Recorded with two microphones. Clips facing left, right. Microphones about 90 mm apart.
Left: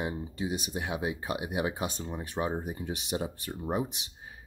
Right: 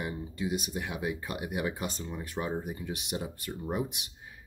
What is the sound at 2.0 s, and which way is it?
Speech, 25° left (ahead or behind).